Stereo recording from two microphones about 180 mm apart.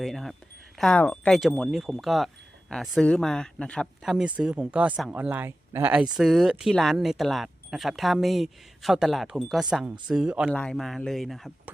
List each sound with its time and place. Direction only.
0.0 s speech: centre (ahead or behind)